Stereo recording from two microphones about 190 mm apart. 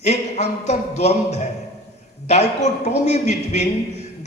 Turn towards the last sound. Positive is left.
turn(degrees=35)  # may be behind; listen again after turning